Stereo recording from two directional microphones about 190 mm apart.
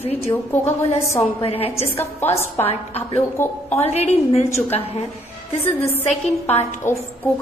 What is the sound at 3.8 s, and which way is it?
A woman's voice, 35° left (ahead or behind).